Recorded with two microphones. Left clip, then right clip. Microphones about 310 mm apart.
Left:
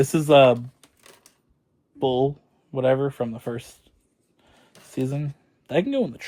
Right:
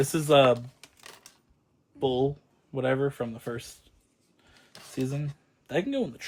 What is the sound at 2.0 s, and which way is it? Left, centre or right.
Speech, centre.